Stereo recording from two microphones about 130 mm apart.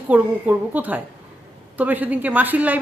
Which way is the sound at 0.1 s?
10° right (ahead or behind).